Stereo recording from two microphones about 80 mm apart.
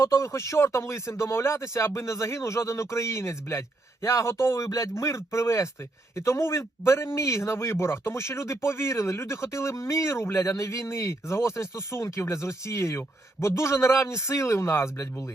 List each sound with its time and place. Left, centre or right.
0.0 s a man's voice: left